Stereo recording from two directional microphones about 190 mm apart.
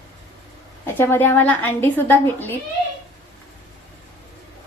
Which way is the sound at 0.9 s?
10° left (ahead or behind).